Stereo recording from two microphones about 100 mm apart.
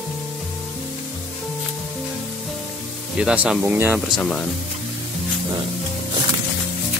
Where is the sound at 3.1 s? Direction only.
10° right (ahead or behind).